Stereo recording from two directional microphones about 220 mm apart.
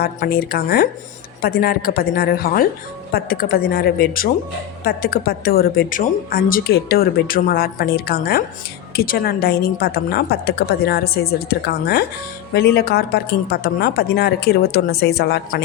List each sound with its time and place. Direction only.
0.0 s a woman's voice: 45° left (ahead or behind)